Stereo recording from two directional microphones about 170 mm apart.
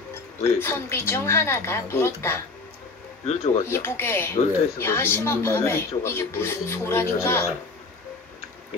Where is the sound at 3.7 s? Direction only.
15° left (ahead or behind).